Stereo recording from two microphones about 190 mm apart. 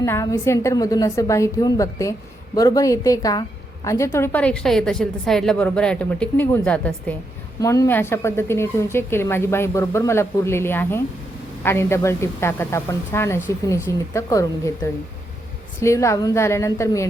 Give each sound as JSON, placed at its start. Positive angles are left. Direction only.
{"t": 0.0, "sound": "a woman's voice", "side_deg": 15}
{"t": 15.8, "sound": "a woman's voice", "side_deg": 15}